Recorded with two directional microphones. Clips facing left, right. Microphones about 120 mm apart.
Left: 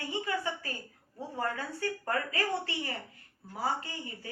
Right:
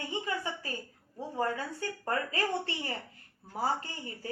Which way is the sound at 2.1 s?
30° right (ahead or behind).